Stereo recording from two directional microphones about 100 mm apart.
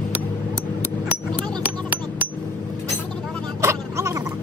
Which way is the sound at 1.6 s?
15° right (ahead or behind).